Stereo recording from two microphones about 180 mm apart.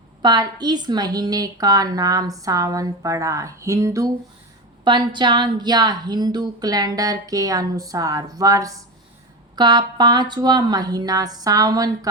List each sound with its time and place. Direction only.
0.2 s a woman's voice: 25° right (ahead or behind)